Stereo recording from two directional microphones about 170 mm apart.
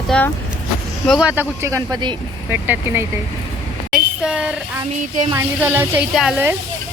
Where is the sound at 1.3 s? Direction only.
15° right (ahead or behind).